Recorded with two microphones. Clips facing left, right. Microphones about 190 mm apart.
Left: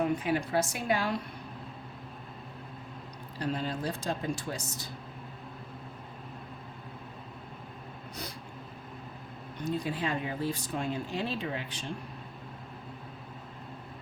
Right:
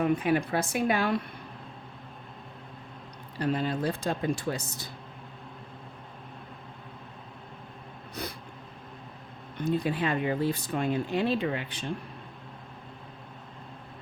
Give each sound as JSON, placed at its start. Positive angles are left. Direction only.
{"t": 0.2, "sound": "speech", "side_deg": -60}
{"t": 3.4, "sound": "speech", "side_deg": -60}
{"t": 8.2, "sound": "a sound", "side_deg": -60}
{"t": 9.6, "sound": "speech", "side_deg": -60}